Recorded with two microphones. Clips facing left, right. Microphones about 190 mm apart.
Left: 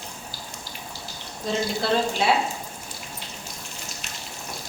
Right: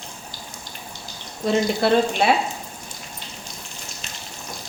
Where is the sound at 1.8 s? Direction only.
60° right (ahead or behind).